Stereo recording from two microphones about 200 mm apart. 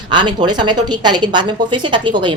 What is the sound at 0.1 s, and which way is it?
Speech, 20° right (ahead or behind).